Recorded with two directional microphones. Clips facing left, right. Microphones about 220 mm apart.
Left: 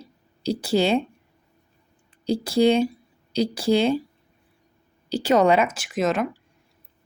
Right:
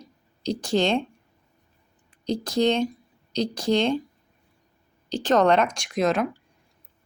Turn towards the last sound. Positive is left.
turn(degrees=0)  # may be behind; listen again after turning